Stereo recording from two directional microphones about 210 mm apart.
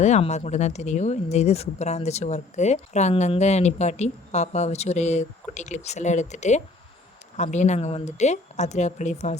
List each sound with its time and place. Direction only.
0.0 s speech: 35° left (ahead or behind)